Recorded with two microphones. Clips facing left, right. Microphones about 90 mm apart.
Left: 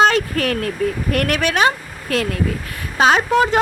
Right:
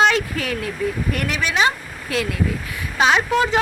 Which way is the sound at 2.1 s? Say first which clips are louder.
Left 2 dB; 45° left (ahead or behind).